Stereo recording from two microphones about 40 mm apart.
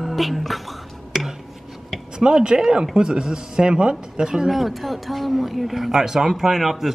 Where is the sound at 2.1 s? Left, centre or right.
Right.